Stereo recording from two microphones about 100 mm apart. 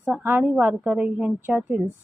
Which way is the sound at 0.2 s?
20° right (ahead or behind).